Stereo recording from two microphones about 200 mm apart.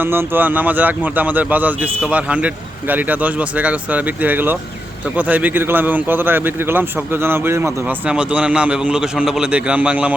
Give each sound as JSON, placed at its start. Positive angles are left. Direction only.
{"t": 0.0, "sound": "speech", "side_deg": -10}